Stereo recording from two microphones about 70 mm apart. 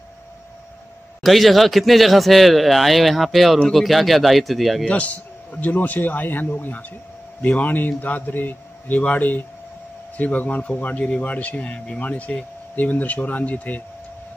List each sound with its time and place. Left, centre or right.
1.2 s a man's voice: centre
4.8 s speech: centre